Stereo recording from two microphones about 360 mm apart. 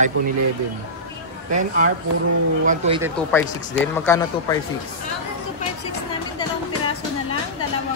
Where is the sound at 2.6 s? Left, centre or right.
Centre.